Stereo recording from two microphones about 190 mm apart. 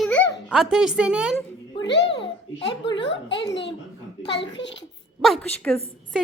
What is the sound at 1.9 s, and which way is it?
Speech, 65° left (ahead or behind).